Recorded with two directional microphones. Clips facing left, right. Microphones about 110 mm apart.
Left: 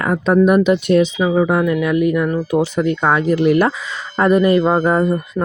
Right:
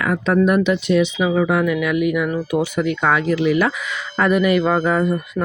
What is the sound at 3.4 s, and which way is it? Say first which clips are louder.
Speech: left 3 dB; 50° left (ahead or behind).